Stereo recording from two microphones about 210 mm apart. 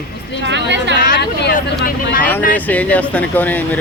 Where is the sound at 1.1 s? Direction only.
55° left (ahead or behind).